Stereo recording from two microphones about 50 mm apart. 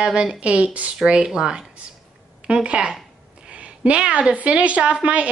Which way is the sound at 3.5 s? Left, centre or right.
Right.